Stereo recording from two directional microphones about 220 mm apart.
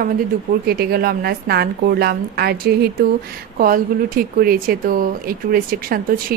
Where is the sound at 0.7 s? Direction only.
45° right (ahead or behind).